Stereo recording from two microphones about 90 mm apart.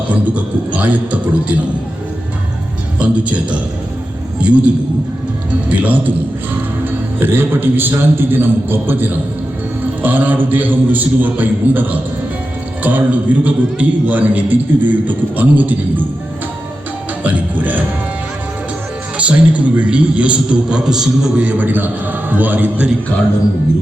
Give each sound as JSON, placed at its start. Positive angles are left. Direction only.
{"t": 0.1, "sound": "a man's voice", "side_deg": -15}
{"t": 4.4, "sound": "a man's voice", "side_deg": -15}
{"t": 17.2, "sound": "music", "side_deg": -15}
{"t": 19.1, "sound": "a man's voice", "side_deg": -15}